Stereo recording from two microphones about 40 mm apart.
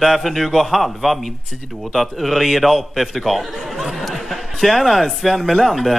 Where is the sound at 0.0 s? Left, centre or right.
Centre.